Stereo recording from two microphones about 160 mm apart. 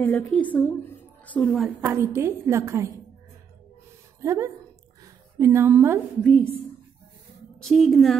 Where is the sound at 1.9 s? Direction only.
15° right (ahead or behind).